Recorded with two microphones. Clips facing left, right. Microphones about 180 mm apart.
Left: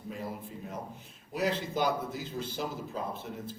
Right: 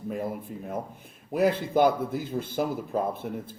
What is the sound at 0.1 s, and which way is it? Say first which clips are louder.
Speech: right 7 dB; 55° right (ahead or behind).